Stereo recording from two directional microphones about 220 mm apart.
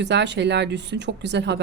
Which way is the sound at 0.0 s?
50° right (ahead or behind).